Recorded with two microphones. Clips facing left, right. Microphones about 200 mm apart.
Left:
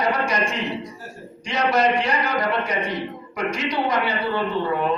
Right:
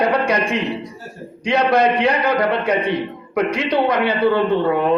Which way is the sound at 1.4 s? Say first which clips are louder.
Right 5 dB; 60° right (ahead or behind).